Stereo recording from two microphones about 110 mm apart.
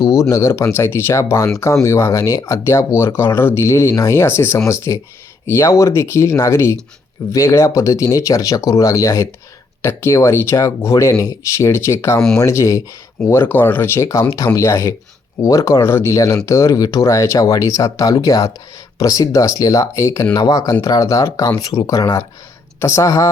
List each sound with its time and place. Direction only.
0.0 s speech: 30° left (ahead or behind)